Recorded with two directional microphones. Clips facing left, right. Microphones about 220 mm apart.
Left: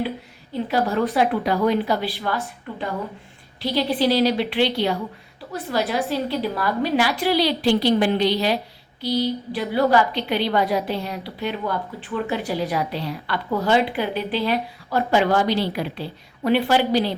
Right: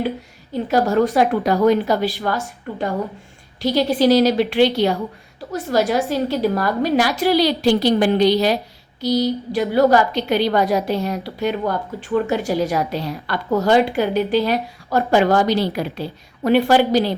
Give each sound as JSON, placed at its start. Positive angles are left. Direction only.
{"t": 0.7, "sound": "a woman's voice", "side_deg": -45}